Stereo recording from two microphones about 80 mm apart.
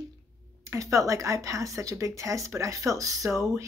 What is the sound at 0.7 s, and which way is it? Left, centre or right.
A woman's voice, right.